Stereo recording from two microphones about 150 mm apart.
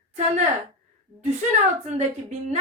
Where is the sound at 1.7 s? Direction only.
50° right (ahead or behind).